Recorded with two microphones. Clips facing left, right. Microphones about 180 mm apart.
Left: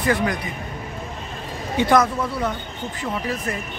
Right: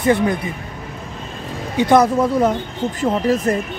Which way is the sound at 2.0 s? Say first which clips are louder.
Right 6 dB; 40° right (ahead or behind).